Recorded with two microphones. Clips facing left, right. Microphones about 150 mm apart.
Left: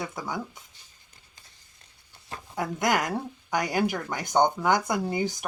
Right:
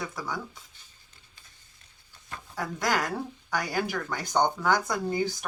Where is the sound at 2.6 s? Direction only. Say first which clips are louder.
Left 3 dB; 20° left (ahead or behind).